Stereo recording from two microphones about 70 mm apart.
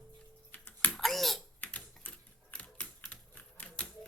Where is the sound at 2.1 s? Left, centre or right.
Centre.